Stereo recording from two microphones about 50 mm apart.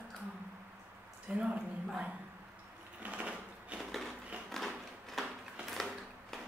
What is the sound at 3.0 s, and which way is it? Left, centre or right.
Sewing machine, right.